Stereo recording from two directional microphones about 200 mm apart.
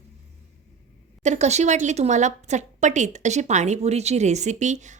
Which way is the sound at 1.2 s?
35° right (ahead or behind).